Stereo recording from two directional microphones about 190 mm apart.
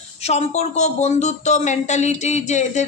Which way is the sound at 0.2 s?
35° left (ahead or behind).